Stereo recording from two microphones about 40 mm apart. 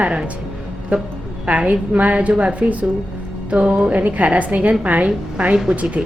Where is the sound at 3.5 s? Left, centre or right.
Right.